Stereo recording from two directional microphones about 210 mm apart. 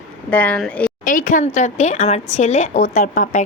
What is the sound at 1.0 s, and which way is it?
Speech, 40° left (ahead or behind).